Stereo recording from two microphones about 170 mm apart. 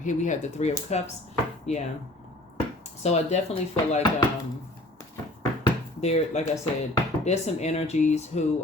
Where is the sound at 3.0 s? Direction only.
40° left (ahead or behind).